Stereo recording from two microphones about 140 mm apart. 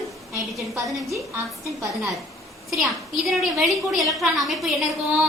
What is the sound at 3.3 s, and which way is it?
A woman's voice, centre (ahead or behind).